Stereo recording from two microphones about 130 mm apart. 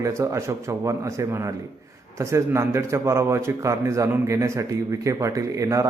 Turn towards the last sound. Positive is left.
turn(degrees=-25)  # may be behind; listen again after turning